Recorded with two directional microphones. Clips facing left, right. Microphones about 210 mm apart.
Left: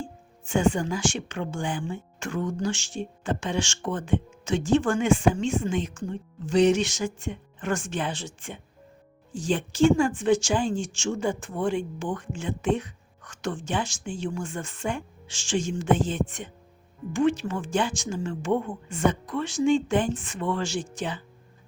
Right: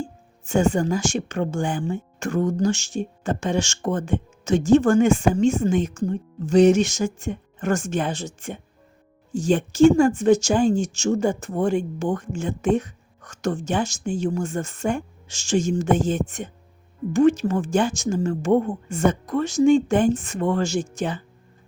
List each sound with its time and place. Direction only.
0.0 s speech: 40° right (ahead or behind)